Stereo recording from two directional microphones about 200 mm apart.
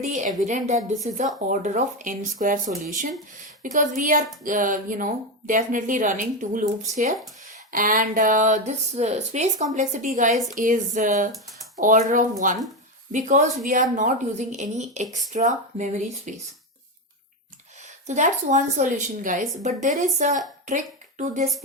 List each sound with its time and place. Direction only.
0.0 s speech: 35° right (ahead or behind)
18.0 s speech: 35° right (ahead or behind)